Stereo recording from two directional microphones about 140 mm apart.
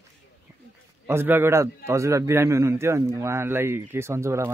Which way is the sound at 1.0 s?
15° right (ahead or behind).